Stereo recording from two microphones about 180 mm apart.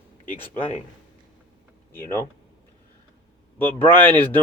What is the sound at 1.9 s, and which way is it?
Speech, 15° left (ahead or behind).